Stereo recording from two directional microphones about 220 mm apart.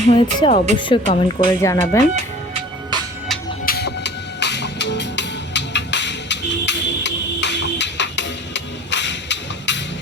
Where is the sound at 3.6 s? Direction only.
45° left (ahead or behind).